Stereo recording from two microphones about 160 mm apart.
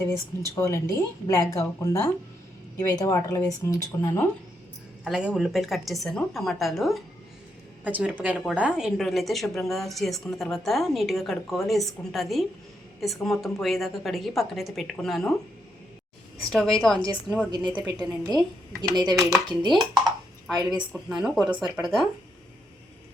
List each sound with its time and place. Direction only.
0.0 s a woman's voice: 20° left (ahead or behind)
5.0 s a woman's voice: 5° right (ahead or behind)
16.5 s a woman's voice: 5° left (ahead or behind)
17.7 s a woman's voice: 10° right (ahead or behind)
17.9 s a woman's voice: 25° right (ahead or behind)
20.6 s a woman's voice: 5° right (ahead or behind)